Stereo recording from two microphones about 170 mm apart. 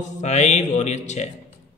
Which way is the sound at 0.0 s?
45° left (ahead or behind).